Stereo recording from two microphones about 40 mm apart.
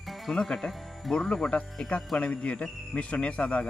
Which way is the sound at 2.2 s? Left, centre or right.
Left.